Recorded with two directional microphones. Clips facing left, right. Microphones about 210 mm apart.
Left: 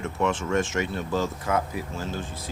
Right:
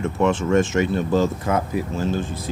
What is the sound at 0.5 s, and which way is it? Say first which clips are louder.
Speech: right 7 dB; 25° right (ahead or behind).